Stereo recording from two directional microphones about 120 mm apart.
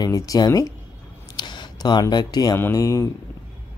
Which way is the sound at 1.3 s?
40° left (ahead or behind).